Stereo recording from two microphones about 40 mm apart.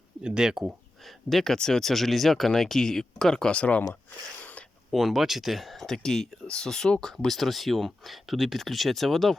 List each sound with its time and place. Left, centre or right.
0.2 s speech: centre
1.0 s speech: centre
3.5 s speech: left
4.9 s speech: centre
5.8 s speech: centre